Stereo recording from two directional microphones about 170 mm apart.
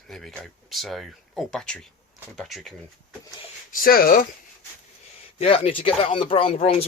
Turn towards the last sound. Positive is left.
turn(degrees=35)  # may be behind; listen again after turning